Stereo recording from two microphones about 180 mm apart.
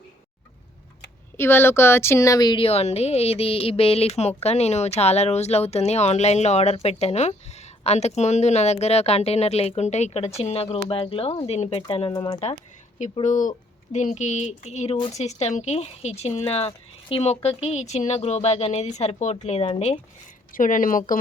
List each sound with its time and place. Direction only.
1.4 s speech: 10° left (ahead or behind); by 12.4 s 30° left (ahead or behind)
13.2 s speech: 45° left (ahead or behind)
14.9 s a woman's voice: 25° left (ahead or behind)
15.2 s speech: 40° left (ahead or behind)
20.5 s speech: 50° left (ahead or behind)